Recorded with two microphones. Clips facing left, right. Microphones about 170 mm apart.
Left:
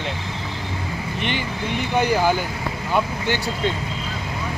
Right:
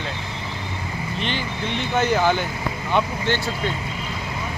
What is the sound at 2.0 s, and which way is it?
Speech, 10° left (ahead or behind).